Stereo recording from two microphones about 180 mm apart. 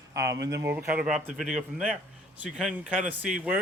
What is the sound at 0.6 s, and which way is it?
Speech, 10° right (ahead or behind).